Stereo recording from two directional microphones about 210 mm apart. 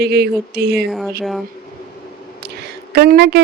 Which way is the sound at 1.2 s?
Centre (ahead or behind).